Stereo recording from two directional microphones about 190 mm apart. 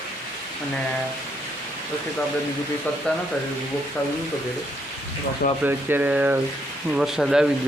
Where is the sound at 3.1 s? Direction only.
5° left (ahead or behind).